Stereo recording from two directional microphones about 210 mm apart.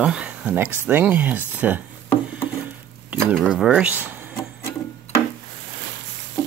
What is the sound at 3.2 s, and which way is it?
Speech, centre (ahead or behind).